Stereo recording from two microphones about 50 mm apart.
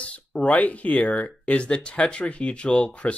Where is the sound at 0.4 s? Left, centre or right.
Left.